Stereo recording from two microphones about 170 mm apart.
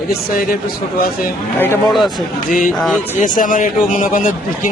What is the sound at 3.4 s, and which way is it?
Speech, 50° left (ahead or behind).